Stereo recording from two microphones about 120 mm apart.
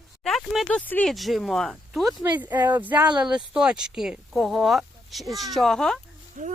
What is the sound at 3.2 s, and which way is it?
Speech, 5° right (ahead or behind).